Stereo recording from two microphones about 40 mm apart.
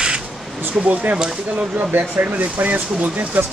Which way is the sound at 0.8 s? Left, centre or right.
Right.